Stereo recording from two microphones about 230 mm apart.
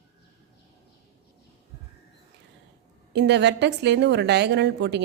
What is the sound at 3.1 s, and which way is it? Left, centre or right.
A woman's voice, right.